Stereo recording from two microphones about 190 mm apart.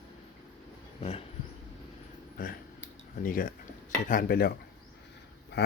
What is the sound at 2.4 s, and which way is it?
Speech, 45° left (ahead or behind).